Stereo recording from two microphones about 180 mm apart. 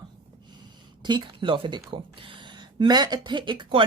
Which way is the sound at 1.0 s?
25° right (ahead or behind).